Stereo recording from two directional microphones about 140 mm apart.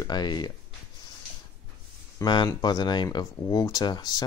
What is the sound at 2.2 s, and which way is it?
Speech, 30° left (ahead or behind).